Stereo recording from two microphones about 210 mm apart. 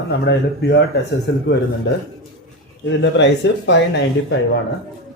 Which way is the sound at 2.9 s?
60° left (ahead or behind).